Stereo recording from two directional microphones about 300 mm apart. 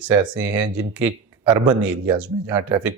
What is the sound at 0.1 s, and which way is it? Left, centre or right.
Speech, centre.